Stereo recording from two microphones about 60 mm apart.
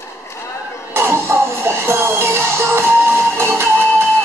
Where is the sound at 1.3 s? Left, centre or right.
Right.